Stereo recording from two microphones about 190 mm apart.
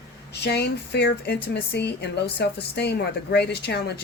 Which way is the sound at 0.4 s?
60° left (ahead or behind).